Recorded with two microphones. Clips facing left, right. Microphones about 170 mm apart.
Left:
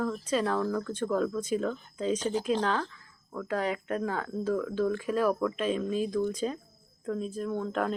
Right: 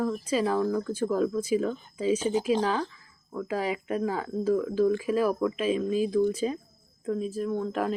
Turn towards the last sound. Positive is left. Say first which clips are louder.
# right 2 dB
turn(degrees=-5)  # may be behind; listen again after turning